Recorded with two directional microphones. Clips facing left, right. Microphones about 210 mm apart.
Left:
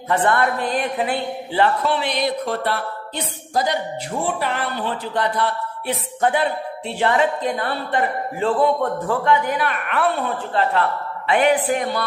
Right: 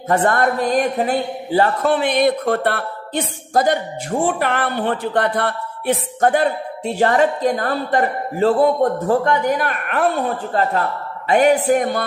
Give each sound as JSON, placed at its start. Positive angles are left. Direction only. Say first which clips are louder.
{"t": 0.1, "sound": "a man's voice", "louder": "right 2 dB", "side_deg": -40}